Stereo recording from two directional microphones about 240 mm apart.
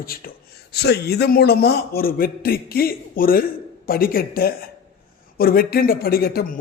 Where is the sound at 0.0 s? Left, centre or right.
Left.